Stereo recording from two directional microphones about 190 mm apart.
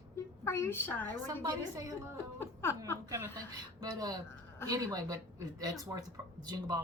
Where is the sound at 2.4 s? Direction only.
10° left (ahead or behind).